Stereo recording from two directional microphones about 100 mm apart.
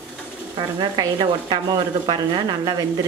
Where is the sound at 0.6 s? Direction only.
50° right (ahead or behind).